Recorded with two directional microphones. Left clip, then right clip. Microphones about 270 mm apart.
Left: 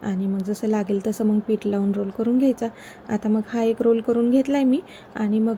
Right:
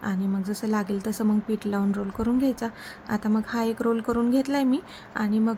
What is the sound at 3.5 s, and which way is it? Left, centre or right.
Speech, centre.